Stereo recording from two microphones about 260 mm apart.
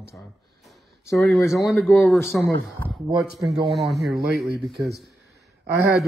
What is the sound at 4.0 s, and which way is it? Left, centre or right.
Speech, right.